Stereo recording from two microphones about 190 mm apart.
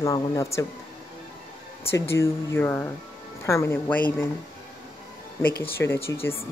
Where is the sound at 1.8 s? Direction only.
15° left (ahead or behind).